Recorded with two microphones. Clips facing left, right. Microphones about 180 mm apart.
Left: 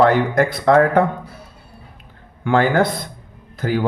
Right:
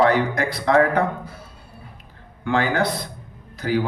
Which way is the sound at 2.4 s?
50° left (ahead or behind).